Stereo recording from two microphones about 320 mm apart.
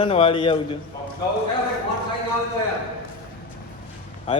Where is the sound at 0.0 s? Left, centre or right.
Centre.